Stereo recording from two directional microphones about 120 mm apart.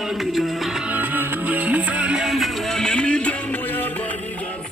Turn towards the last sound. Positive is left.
turn(degrees=10)  # may be behind; listen again after turning